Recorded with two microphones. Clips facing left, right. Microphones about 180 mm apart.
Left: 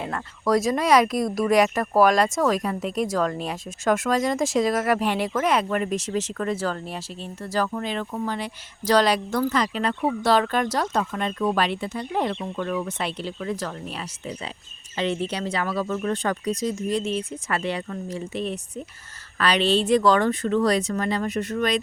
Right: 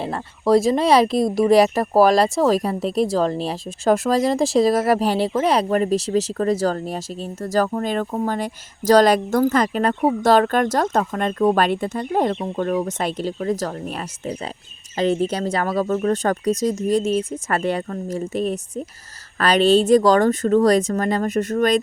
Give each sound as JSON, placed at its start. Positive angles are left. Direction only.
{"t": 0.0, "sound": "speech", "side_deg": -30}